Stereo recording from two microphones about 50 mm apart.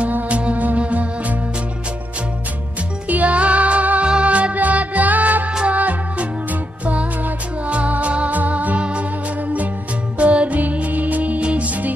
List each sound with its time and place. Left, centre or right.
0.1 s music: right
3.1 s music: right
10.1 s music: right